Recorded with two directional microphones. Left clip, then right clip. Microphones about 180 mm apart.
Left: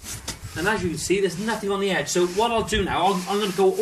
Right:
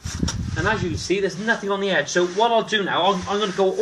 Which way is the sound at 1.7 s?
Centre (ahead or behind).